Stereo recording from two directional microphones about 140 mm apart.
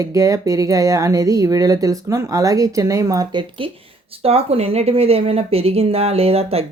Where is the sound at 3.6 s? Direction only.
40° right (ahead or behind).